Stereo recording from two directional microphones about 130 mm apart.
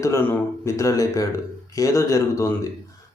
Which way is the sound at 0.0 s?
20° left (ahead or behind).